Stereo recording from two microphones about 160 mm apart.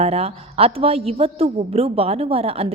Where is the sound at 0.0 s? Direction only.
40° right (ahead or behind).